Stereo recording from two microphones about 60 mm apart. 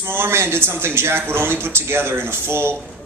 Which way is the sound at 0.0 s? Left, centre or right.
Right.